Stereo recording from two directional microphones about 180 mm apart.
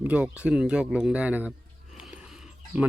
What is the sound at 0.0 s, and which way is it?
A man's voice, 5° right (ahead or behind).